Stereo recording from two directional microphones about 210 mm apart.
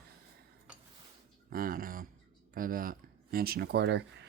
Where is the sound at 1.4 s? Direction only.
45° right (ahead or behind).